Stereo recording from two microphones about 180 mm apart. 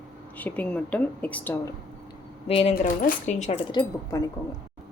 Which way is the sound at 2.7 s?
50° left (ahead or behind).